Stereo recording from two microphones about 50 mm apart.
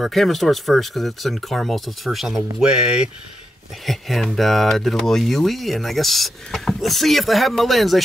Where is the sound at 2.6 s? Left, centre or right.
Centre.